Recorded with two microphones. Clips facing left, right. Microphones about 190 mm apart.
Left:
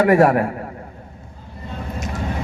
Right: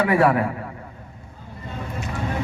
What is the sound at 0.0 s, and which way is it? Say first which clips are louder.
Speech: left 4 dB; 45° left (ahead or behind).